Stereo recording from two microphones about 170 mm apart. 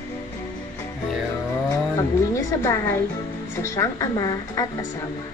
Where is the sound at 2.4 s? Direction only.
20° left (ahead or behind).